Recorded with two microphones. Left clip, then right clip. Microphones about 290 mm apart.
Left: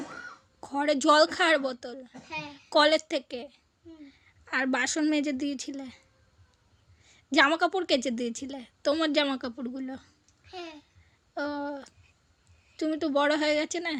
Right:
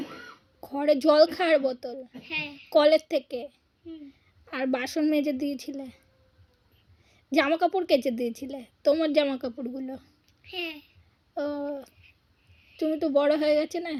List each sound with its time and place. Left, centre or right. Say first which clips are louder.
0.6 s a woman's voice: right 3 dB; left
7.0 s a woman's voice: left 2 dB; left